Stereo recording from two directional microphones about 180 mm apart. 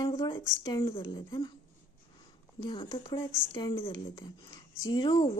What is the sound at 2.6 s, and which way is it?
Speech, 25° left (ahead or behind).